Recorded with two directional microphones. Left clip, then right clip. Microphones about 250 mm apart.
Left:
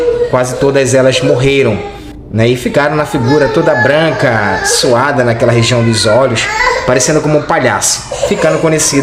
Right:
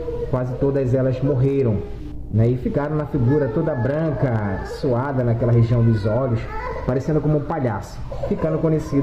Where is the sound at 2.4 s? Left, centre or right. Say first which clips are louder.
Left 12 dB; left.